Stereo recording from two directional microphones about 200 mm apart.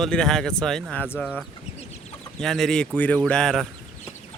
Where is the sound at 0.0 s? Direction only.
5° left (ahead or behind).